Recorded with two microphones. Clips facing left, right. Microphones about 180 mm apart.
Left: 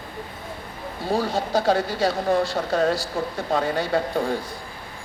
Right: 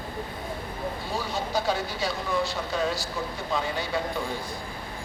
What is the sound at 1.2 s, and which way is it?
Speech, 65° left (ahead or behind).